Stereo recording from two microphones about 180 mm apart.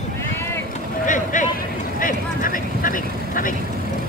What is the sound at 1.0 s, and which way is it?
Vehicle, 45° left (ahead or behind).